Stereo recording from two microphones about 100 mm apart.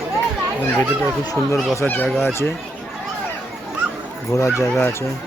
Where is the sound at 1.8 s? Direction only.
15° left (ahead or behind).